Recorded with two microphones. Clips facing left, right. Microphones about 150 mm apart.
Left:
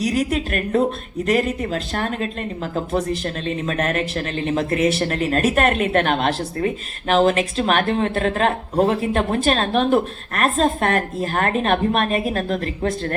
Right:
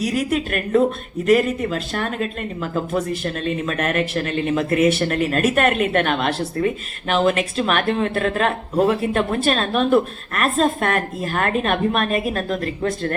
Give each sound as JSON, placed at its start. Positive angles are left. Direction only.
{"t": 0.1, "sound": "speech", "side_deg": 35}